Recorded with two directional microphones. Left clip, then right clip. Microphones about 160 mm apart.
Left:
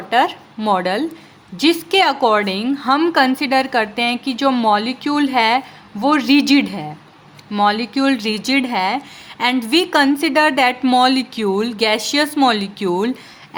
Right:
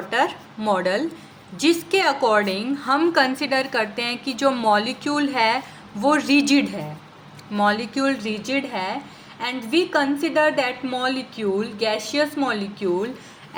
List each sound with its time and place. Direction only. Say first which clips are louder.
0.1 s a woman's voice: left 6 dB; 35° left (ahead or behind); by 13.1 s 55° left (ahead or behind)